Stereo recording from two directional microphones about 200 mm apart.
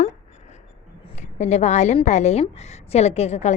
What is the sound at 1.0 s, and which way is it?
A woman's voice, 35° left (ahead or behind).